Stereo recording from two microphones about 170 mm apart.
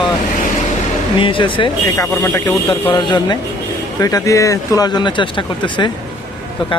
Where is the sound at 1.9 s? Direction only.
15° left (ahead or behind).